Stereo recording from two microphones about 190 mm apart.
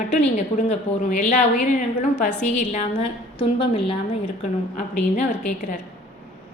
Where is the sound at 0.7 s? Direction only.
40° left (ahead or behind).